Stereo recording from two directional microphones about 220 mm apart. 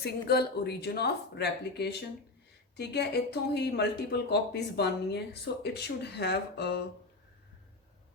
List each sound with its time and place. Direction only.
0.0 s speech: 45° left (ahead or behind)